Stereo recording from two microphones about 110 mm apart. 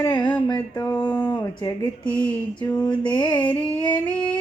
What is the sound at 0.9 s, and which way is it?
Speech, 40° left (ahead or behind).